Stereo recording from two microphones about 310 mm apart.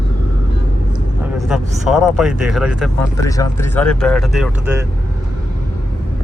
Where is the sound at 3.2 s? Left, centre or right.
Centre.